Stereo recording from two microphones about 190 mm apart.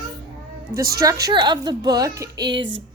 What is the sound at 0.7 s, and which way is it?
Speech, 50° right (ahead or behind).